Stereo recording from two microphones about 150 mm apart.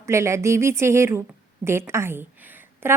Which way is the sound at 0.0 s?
20° right (ahead or behind).